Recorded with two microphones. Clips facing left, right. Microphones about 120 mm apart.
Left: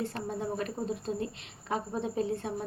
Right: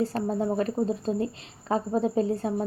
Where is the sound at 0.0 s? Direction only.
35° right (ahead or behind).